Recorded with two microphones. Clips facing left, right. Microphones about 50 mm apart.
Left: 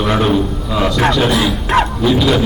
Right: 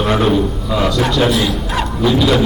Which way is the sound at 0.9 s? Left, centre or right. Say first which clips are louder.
Left 2 dB; left.